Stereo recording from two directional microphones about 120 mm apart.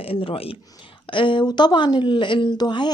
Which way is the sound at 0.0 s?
50° left (ahead or behind).